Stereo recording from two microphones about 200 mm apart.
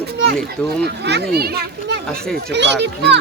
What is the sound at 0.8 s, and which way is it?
A child's voice, 55° right (ahead or behind).